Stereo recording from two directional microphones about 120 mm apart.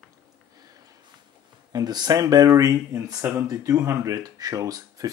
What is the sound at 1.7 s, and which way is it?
Speech, 35° right (ahead or behind).